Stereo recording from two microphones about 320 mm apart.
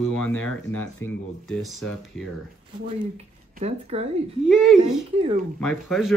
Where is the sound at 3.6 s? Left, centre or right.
Centre.